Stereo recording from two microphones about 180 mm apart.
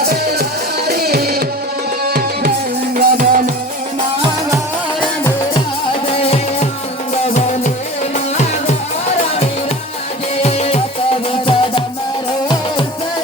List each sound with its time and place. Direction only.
0.0 s music: 60° right (ahead or behind)
6.1 s music: 30° left (ahead or behind)
10.4 s music: 35° left (ahead or behind)